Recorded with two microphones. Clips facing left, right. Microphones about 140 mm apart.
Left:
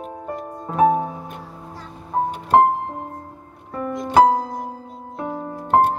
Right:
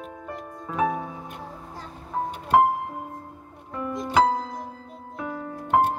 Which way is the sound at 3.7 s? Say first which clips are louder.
Left 4 dB; 45° left (ahead or behind).